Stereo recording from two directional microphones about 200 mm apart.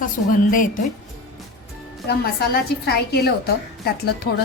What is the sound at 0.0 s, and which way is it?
Speech, 40° left (ahead or behind).